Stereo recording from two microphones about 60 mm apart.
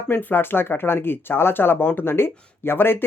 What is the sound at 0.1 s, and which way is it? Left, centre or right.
Speech, left.